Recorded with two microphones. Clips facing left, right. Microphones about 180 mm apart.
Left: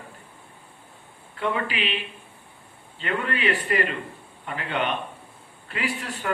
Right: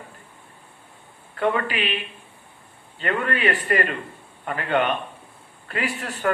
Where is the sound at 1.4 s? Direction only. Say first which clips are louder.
Right 4 dB; 50° right (ahead or behind).